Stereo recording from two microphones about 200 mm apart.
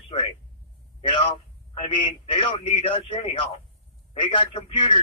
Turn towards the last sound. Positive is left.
turn(degrees=25)  # may be behind; listen again after turning